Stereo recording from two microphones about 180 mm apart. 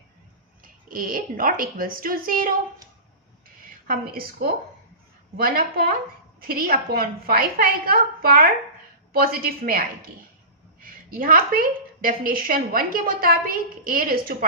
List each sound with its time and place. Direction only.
0.6 s a woman's voice: 50° right (ahead or behind)
3.4 s a sound: 55° right (ahead or behind)
5.4 s a woman's voice: 55° right (ahead or behind)